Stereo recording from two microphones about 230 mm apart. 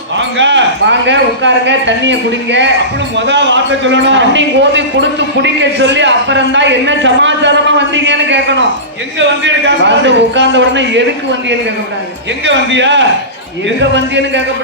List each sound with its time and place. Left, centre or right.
0.3 s a man's voice: right
12.5 s a man's voice: right